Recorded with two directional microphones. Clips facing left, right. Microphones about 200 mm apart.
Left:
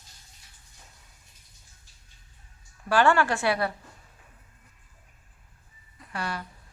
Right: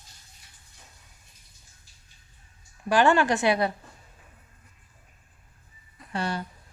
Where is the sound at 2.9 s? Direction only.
20° right (ahead or behind).